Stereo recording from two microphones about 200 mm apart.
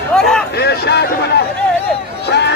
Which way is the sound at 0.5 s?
55° left (ahead or behind).